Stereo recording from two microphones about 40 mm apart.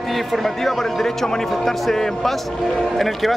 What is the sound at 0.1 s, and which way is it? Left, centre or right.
Speech, centre.